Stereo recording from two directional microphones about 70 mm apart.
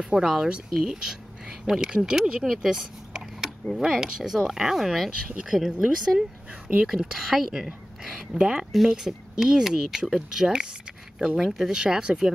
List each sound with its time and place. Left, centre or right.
0.0 s speech: centre
2.4 s a sound: centre
3.7 s speech: centre